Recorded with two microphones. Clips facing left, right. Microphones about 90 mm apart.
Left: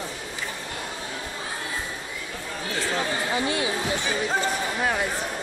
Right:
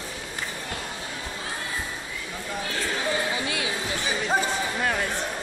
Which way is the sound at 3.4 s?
35° left (ahead or behind).